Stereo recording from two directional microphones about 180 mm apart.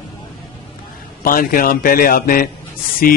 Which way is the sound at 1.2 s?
50° left (ahead or behind).